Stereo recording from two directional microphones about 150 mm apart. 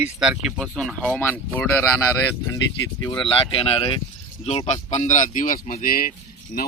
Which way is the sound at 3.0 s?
30° left (ahead or behind).